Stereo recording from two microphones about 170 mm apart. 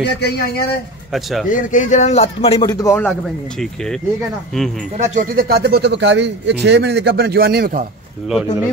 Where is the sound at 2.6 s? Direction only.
20° left (ahead or behind).